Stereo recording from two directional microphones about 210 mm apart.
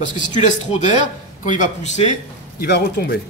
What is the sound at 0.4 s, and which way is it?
A man's voice, 35° left (ahead or behind).